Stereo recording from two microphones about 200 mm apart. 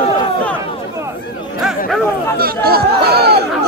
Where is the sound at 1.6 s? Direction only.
Centre (ahead or behind).